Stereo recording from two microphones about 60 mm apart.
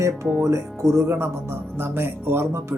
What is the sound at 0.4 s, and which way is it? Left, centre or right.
Speech, right.